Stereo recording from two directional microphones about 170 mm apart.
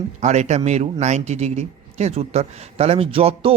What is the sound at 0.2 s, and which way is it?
A man's voice, 40° right (ahead or behind).